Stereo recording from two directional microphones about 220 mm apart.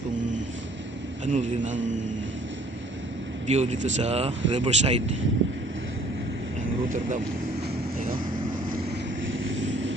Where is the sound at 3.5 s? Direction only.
35° right (ahead or behind).